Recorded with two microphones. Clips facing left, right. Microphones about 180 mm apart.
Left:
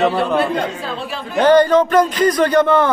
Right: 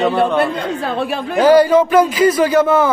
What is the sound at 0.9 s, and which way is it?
Speech, 55° right (ahead or behind).